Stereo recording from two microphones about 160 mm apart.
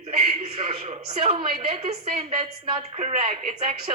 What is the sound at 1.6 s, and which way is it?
A woman's voice, 40° right (ahead or behind).